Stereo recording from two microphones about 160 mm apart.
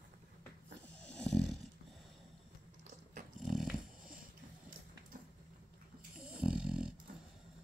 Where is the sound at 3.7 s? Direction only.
60° right (ahead or behind).